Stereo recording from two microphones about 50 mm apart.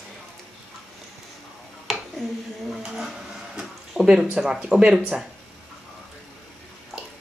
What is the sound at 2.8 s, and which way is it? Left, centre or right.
Speech, centre.